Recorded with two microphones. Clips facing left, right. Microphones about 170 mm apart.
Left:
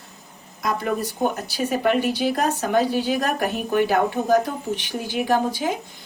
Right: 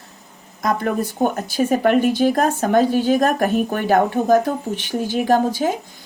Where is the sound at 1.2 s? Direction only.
50° right (ahead or behind).